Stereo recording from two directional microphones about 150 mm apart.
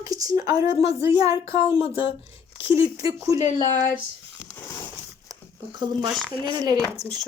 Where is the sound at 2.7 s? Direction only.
20° right (ahead or behind).